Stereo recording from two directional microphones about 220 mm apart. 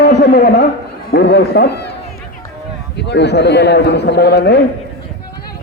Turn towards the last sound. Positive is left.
turn(degrees=50)  # may be behind; listen again after turning